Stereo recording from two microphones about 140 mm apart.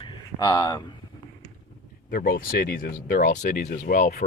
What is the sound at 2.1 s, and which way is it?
Speech, 85° left.